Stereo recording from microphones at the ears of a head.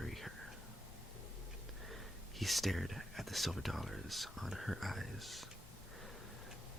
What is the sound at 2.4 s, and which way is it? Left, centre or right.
Speech, centre.